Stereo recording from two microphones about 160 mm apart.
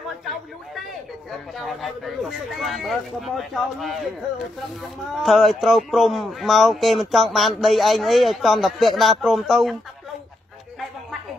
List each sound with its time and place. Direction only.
1.6 s a man's voice: centre (ahead or behind)
5.2 s a man's voice: centre (ahead or behind)